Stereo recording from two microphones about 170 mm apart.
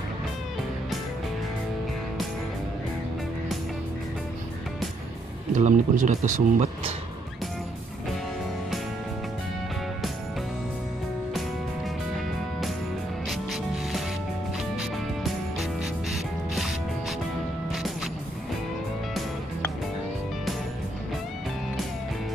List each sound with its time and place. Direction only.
5.5 s speech: 45° right (ahead or behind)
13.3 s music: centre (ahead or behind)